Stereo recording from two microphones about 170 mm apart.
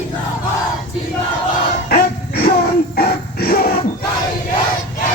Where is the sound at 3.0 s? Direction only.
60° left (ahead or behind).